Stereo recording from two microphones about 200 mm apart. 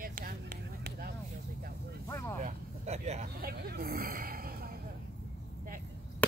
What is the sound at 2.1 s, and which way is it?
Speech, 15° left (ahead or behind).